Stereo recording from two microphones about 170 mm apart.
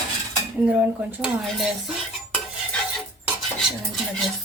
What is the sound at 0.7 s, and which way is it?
Dishes, 5° right (ahead or behind).